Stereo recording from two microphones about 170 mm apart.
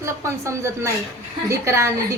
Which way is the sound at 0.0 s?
15° right (ahead or behind).